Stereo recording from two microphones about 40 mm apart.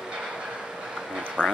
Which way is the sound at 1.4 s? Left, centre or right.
Left.